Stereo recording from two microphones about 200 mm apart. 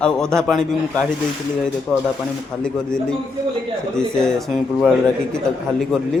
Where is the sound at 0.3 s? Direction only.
Centre (ahead or behind).